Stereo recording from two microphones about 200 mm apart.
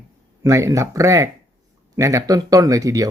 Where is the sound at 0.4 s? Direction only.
15° right (ahead or behind).